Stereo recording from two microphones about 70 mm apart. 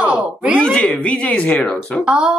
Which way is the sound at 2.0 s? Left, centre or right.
Centre.